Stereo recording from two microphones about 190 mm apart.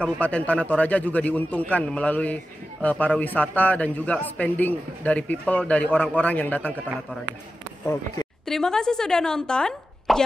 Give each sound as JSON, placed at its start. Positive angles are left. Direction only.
{"t": 0.0, "sound": "a man's voice", "side_deg": 5}
{"t": 7.8, "sound": "speech", "side_deg": 15}
{"t": 8.5, "sound": "speech", "side_deg": 5}